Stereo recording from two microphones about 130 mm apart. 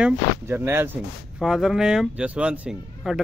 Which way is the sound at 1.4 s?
5° right (ahead or behind).